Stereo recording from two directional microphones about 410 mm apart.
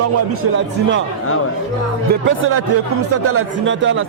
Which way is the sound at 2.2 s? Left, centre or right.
Right.